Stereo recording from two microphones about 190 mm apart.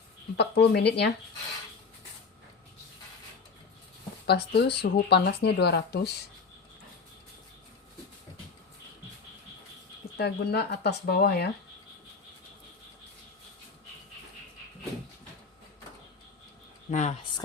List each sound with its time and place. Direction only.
0.3 s speech: 60° left (ahead or behind)
4.3 s speech: 60° left (ahead or behind)
10.2 s speech: 60° left (ahead or behind)
16.9 s speech: 40° left (ahead or behind)